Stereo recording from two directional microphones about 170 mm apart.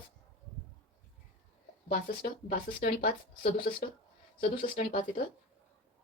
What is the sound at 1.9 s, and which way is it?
A woman's voice, 60° left (ahead or behind).